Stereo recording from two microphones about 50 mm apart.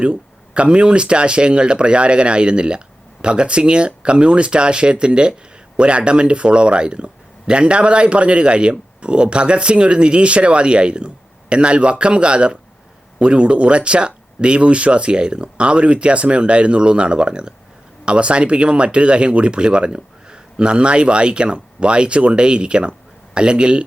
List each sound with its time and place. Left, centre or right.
0.0 s speech: right